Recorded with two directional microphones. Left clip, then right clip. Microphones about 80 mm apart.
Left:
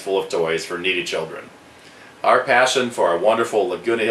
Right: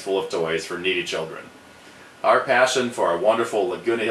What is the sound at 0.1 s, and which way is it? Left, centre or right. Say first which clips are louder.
Speech: left 3 dB; left.